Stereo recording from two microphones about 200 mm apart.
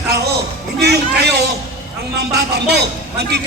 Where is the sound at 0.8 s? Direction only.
55° right (ahead or behind).